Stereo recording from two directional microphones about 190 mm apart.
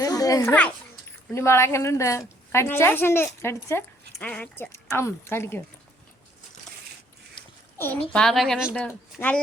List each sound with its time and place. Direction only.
0.0 s a sound: 20° left (ahead or behind)
1.3 s a woman's voice: 15° left (ahead or behind)
7.8 s a woman's voice: 10° left (ahead or behind)